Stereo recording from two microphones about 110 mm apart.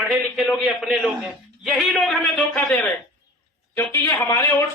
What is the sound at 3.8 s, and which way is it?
Speech, 25° left (ahead or behind).